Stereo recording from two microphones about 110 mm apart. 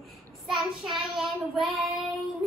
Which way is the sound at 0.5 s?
Centre (ahead or behind).